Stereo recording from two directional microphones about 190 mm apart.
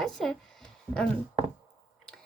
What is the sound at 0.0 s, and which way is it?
A woman's voice, 5° left (ahead or behind).